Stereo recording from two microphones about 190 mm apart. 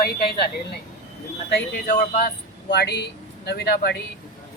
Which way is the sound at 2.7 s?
60° left (ahead or behind).